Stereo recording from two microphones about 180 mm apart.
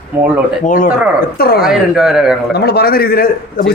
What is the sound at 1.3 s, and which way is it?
Speech, 60° left (ahead or behind).